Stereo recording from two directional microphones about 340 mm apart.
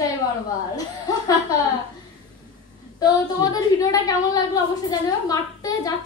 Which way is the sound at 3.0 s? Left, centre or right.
Centre.